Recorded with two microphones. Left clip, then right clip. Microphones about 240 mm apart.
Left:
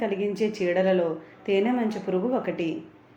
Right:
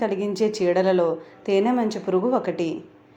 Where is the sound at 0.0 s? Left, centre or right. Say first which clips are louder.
Right 3 dB; right.